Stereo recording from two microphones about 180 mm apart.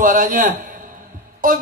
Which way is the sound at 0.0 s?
50° right (ahead or behind).